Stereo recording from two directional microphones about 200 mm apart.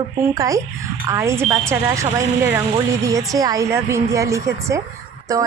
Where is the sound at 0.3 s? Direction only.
15° right (ahead or behind).